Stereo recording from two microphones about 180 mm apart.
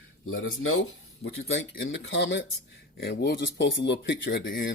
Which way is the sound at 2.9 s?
65° left (ahead or behind).